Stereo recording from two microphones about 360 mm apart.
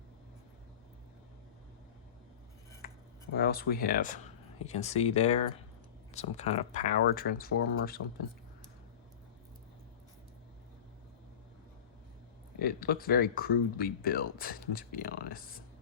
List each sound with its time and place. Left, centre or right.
2.8 s a sound: left
3.4 s speech: left
12.5 s speech: left